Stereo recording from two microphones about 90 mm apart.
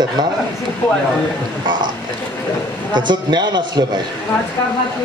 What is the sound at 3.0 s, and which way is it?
A man's voice, 55° right (ahead or behind).